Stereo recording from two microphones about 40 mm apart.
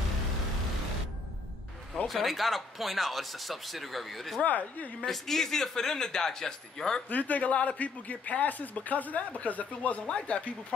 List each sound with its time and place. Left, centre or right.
2.0 s speech: centre
4.4 s speech: left
5.0 s speech: centre
7.1 s speech: left